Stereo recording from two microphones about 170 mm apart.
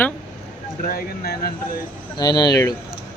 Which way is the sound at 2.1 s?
25° left (ahead or behind).